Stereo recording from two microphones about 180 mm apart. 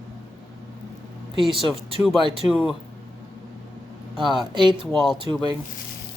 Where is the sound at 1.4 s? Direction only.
30° right (ahead or behind).